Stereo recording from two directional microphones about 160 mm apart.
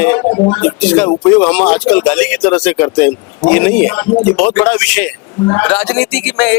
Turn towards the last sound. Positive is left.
turn(degrees=5)  # may be behind; listen again after turning